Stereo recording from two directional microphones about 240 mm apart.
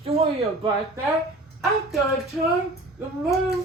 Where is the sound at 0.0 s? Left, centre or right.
Right.